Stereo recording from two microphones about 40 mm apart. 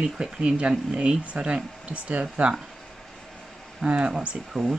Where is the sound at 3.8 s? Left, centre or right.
Right.